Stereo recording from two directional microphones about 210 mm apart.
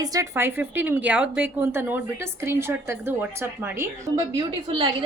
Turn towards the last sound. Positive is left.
turn(degrees=-25)  # may be behind; listen again after turning